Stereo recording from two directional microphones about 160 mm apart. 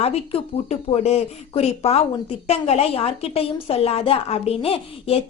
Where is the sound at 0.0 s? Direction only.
40° left (ahead or behind).